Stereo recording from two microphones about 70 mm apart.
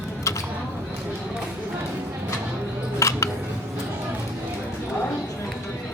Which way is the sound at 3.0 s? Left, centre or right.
Left.